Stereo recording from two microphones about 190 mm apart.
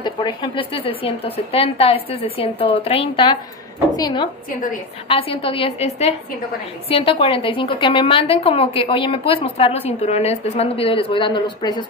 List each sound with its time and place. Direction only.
0.0 s a woman's voice: 25° left (ahead or behind)